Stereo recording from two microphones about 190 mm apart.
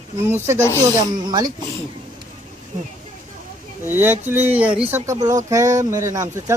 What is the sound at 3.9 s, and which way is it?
Speech, 10° right (ahead or behind).